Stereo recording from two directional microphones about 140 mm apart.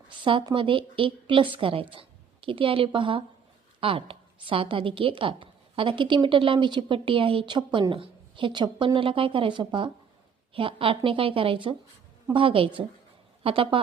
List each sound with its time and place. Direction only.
0.1 s a woman's voice: 35° right (ahead or behind)